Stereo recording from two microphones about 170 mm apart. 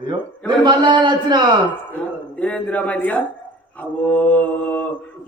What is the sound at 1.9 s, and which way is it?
A man's voice, 10° left (ahead or behind).